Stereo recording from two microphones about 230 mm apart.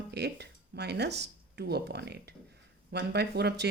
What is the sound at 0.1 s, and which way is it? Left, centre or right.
Speech, right.